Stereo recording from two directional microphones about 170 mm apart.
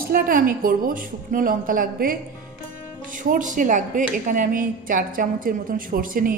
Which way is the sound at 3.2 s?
50° right (ahead or behind).